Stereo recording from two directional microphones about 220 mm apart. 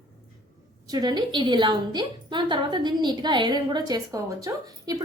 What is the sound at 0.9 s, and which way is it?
A woman's voice, 15° right (ahead or behind).